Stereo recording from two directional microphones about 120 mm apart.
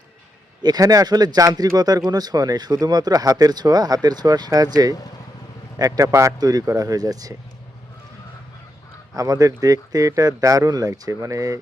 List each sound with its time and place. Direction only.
0.6 s speech: 35° right (ahead or behind)
9.1 s speech: 30° right (ahead or behind)